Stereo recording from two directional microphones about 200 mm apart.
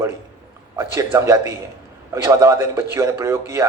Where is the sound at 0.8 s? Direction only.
15° right (ahead or behind).